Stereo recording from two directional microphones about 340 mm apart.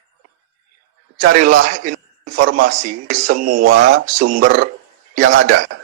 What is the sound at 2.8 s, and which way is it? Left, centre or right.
Speech, right.